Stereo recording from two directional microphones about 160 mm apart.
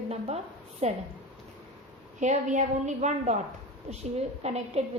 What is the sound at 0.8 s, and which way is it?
Speech, 45° right (ahead or behind).